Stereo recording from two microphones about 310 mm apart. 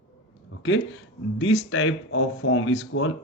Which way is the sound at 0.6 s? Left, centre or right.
Left.